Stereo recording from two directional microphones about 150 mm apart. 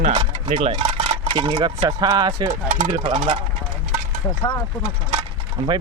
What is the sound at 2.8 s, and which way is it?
Speech, 45° right (ahead or behind).